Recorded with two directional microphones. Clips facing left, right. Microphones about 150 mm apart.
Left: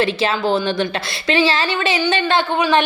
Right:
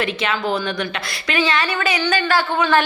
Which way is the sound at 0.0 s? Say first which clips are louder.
Left 4 dB; 30° left (ahead or behind).